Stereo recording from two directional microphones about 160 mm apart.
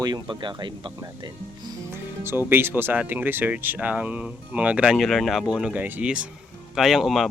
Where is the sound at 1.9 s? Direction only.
15° right (ahead or behind).